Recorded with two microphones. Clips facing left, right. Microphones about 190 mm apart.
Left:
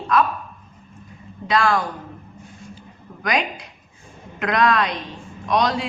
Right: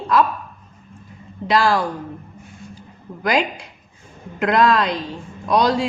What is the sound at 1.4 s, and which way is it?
Speech, 30° right (ahead or behind).